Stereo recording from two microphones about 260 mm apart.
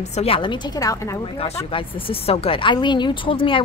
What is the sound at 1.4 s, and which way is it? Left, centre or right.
Speech, left.